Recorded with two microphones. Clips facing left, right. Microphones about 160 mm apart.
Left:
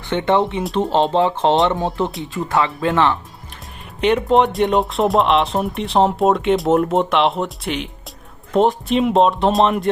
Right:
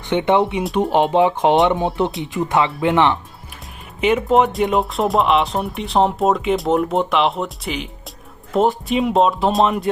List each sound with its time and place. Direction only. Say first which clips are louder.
0.1 s speech: right 1 dB; 15° right (ahead or behind)
4.0 s speech: even; 5° right (ahead or behind)